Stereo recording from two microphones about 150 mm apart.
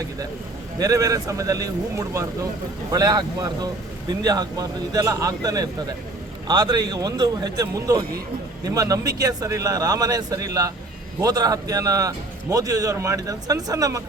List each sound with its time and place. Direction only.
0.8 s a man's voice: 25° right (ahead or behind)